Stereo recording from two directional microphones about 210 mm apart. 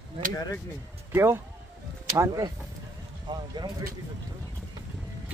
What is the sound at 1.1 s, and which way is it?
Speech, 10° right (ahead or behind).